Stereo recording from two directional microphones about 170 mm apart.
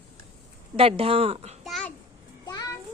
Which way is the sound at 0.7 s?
35° right (ahead or behind).